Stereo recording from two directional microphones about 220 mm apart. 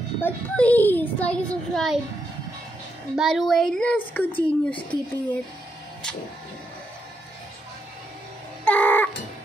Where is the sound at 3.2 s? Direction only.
Centre (ahead or behind).